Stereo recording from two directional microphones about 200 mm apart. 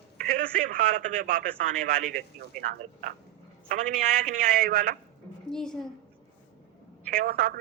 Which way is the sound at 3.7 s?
40° right (ahead or behind).